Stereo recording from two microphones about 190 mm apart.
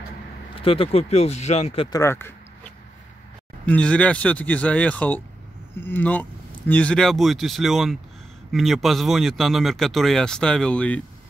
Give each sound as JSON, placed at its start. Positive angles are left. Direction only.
{"t": 0.6, "sound": "speech", "side_deg": 30}
{"t": 1.9, "sound": "a sound", "side_deg": 15}
{"t": 3.6, "sound": "speech", "side_deg": 5}